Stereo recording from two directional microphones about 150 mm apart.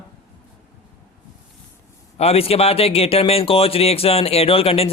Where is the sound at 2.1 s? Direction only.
40° left (ahead or behind).